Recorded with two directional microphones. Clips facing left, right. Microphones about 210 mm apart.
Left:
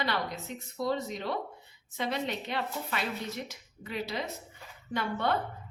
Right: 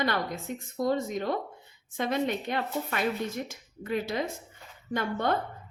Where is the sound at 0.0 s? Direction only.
50° right (ahead or behind).